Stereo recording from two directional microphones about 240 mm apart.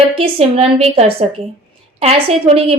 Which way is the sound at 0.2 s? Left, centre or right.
Right.